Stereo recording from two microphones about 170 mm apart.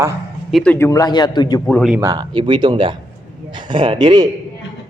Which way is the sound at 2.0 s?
25° right (ahead or behind).